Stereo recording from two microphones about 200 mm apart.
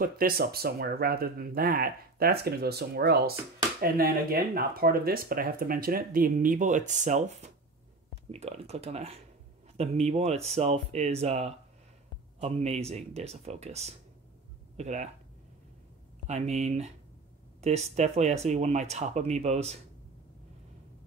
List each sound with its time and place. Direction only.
0.0 s speech: 50° right (ahead or behind)
16.3 s speech: 35° right (ahead or behind)